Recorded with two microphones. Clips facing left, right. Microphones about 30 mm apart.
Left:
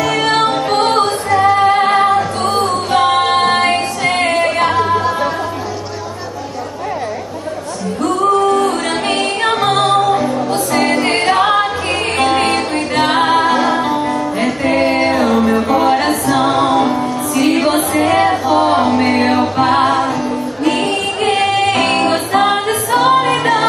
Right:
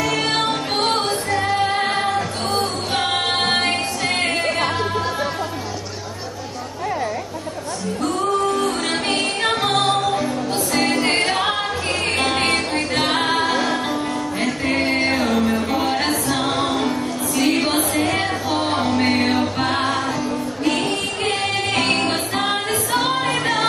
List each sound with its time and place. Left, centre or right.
0.0 s music: centre
1.7 s music: centre
8.0 s music: centre
21.3 s music: left